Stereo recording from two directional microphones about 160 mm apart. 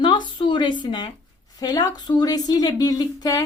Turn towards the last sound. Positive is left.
turn(degrees=25)  # may be behind; listen again after turning